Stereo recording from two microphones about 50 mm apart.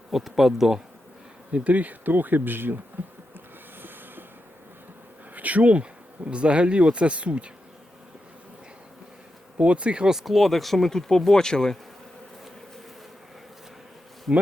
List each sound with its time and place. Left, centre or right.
0.1 s speech: centre
1.5 s speech: right
3.8 s train: right
5.3 s speech: right
9.6 s speech: right
10.2 s speech: centre
14.3 s bee: centre